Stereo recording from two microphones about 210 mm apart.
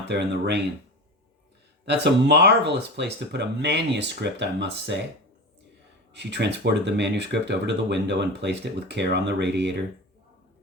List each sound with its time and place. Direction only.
0.1 s speech: 55° right (ahead or behind)
1.8 s speech: 55° right (ahead or behind)
6.1 s speech: 55° right (ahead or behind)